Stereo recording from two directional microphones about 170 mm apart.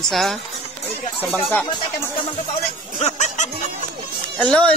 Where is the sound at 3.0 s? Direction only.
40° left (ahead or behind).